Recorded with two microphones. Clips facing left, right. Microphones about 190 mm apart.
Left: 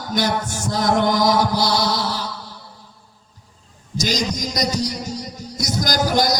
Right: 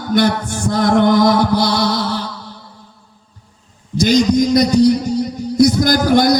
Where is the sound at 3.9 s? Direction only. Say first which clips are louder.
Right 11 dB; 55° right (ahead or behind).